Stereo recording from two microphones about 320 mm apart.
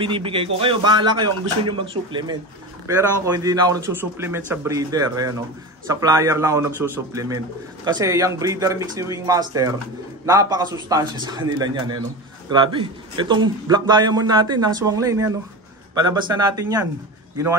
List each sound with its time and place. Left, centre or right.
0.0 s a man's voice: centre